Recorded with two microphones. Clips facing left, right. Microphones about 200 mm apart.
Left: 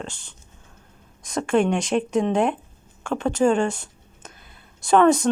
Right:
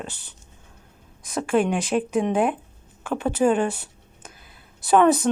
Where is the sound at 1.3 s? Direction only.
5° right (ahead or behind).